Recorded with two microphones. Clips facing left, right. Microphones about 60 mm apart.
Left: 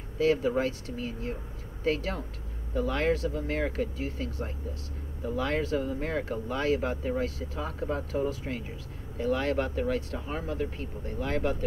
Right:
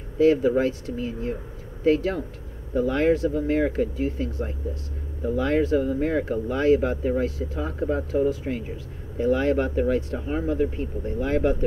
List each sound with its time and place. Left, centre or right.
0.2 s speech: right
9.2 s speech: centre